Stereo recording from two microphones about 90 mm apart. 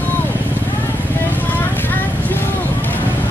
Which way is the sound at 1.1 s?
20° left (ahead or behind).